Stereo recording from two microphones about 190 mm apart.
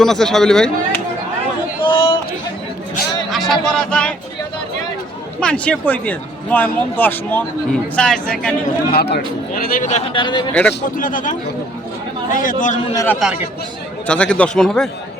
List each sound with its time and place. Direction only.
0.0 s speech: centre (ahead or behind)
1.8 s a sound: 25° left (ahead or behind)
3.2 s speech: centre (ahead or behind)
5.4 s speech: 5° left (ahead or behind)
8.9 s a man's voice: 55° left (ahead or behind)
10.1 s a man's voice: 25° left (ahead or behind)
10.5 s speech: 5° left (ahead or behind)
10.9 s a man's voice: 45° left (ahead or behind)
13.2 s speech: centre (ahead or behind)